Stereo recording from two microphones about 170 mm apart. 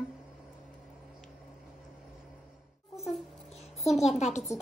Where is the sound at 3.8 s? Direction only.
Centre (ahead or behind).